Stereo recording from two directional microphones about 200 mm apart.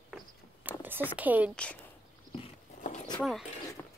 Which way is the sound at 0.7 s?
10° right (ahead or behind).